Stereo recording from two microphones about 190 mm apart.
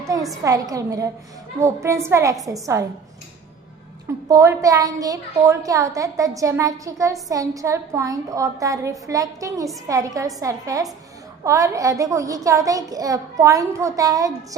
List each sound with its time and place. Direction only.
0.0 s a sound: 15° right (ahead or behind)
0.4 s a woman's voice: 20° right (ahead or behind)
4.3 s a woman's voice: 15° right (ahead or behind)